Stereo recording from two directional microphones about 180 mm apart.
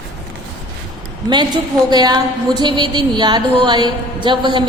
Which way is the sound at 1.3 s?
25° right (ahead or behind).